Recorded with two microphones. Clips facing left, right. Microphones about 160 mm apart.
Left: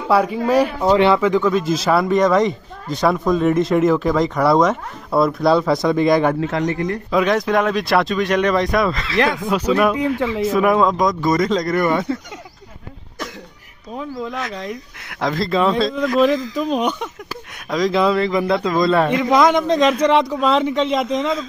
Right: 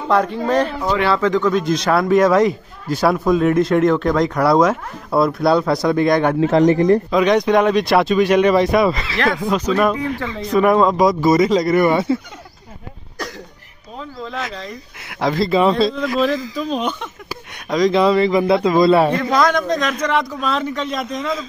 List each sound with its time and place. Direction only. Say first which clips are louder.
0.1 s speech: left 1 dB; 10° left (ahead or behind)
0.7 s a man's voice: left 4 dB; 25° left (ahead or behind)
1.1 s speech: even; 10° left (ahead or behind)
6.5 s speech: right 8 dB; 30° right (ahead or behind)
7.1 s speech: right 3 dB; centre (ahead or behind)
9.5 s speech: even; 10° left (ahead or behind)
10.4 s speech: right 2 dB; centre (ahead or behind)
13.9 s speech: left 2 dB; 10° left (ahead or behind)
15.0 s speech: right 3 dB; 5° right (ahead or behind)
16.5 s speech: left 2 dB; 15° left (ahead or behind)
17.6 s speech: right 2 dB; centre (ahead or behind)
19.1 s a man's voice: left 2 dB; 20° left (ahead or behind)